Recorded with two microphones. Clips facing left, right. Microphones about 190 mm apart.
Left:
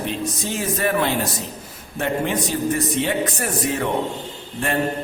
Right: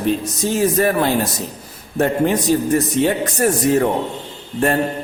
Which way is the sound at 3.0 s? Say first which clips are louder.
Right 6 dB; 40° right (ahead or behind).